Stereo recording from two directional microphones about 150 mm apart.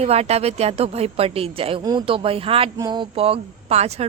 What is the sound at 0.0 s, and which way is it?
A woman's voice, 45° right (ahead or behind).